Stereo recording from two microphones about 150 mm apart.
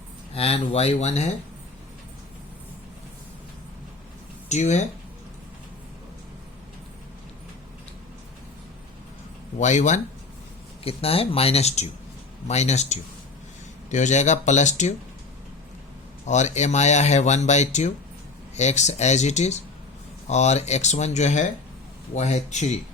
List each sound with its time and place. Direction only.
0.3 s speech: 40° left (ahead or behind)
4.4 s speech: 50° left (ahead or behind)
9.6 s speech: 50° left (ahead or behind)
10.8 s speech: 40° left (ahead or behind)
16.2 s speech: 50° left (ahead or behind)